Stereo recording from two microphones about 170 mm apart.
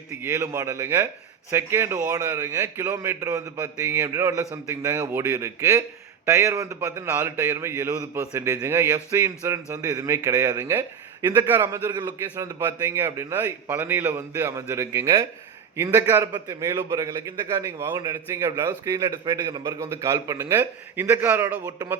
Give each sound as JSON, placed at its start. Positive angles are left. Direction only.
{"t": 0.1, "sound": "a man's voice", "side_deg": -15}